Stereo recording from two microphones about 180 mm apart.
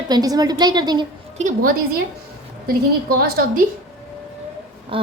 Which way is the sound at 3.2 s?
55° right (ahead or behind).